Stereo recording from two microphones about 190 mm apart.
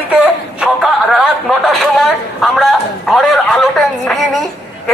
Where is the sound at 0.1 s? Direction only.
5° right (ahead or behind).